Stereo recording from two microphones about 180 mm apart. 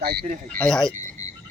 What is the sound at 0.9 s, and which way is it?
Cricket, 40° right (ahead or behind).